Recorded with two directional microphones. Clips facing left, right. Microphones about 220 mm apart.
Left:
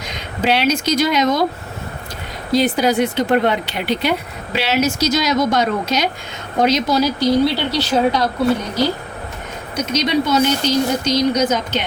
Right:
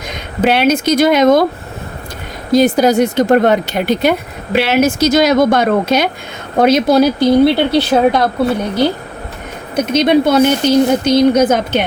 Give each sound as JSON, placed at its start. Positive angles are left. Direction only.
{"t": 0.1, "sound": "speech", "side_deg": -50}
{"t": 2.5, "sound": "speech", "side_deg": -45}
{"t": 9.7, "sound": "speech", "side_deg": -55}